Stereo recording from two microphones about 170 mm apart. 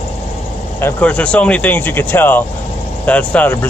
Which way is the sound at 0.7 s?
10° left (ahead or behind).